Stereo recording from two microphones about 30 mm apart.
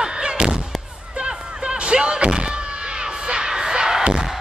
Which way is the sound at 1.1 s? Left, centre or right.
Right.